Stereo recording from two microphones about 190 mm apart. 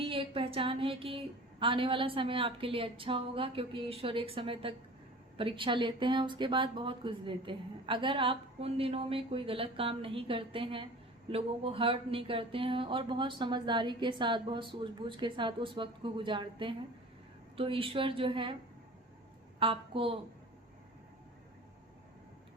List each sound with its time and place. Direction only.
0.0 s speech: 30° right (ahead or behind)
19.5 s a woman's voice: 30° right (ahead or behind)